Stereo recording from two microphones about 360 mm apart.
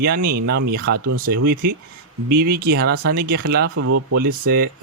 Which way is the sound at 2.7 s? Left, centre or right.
Right.